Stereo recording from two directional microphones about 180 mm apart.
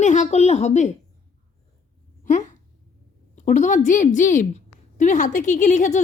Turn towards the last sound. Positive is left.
turn(degrees=40)  # may be behind; listen again after turning